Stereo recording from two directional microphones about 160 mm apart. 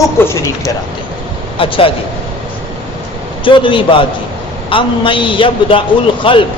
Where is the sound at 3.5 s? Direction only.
30° left (ahead or behind).